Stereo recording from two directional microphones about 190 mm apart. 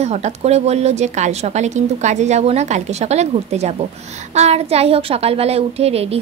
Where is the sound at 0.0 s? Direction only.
35° right (ahead or behind).